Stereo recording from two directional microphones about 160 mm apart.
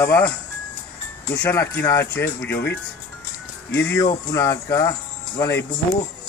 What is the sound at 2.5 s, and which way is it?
Speech, 90° left.